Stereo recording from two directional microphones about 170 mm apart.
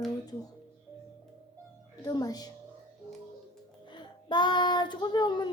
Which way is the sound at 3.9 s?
25° left (ahead or behind).